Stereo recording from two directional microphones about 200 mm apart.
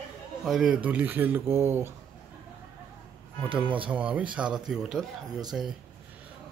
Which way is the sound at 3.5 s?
5° right (ahead or behind).